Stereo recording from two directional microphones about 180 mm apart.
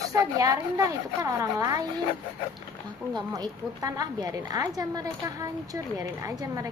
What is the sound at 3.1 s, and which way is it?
A woman's voice, 20° right (ahead or behind).